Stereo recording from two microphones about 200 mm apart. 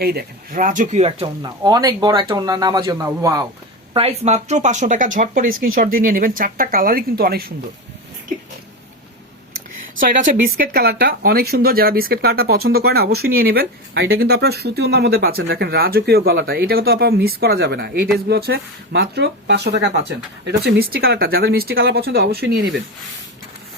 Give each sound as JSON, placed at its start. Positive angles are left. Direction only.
{"t": 0.0, "sound": "speech", "side_deg": -50}
{"t": 3.9, "sound": "speech", "side_deg": -30}
{"t": 10.0, "sound": "speech", "side_deg": -40}